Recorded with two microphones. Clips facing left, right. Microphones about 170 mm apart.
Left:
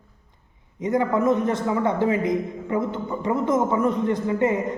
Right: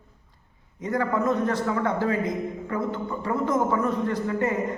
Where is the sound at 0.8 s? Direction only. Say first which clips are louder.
Left 4 dB; 20° left (ahead or behind).